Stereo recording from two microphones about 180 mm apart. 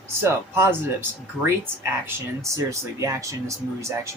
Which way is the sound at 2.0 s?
15° right (ahead or behind).